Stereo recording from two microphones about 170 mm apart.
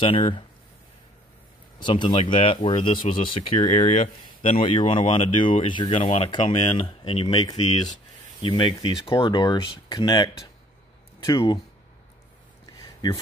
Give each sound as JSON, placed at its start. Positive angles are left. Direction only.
{"t": 0.0, "sound": "speech", "side_deg": 30}
{"t": 1.8, "sound": "speech", "side_deg": 25}
{"t": 12.7, "sound": "a sound", "side_deg": 20}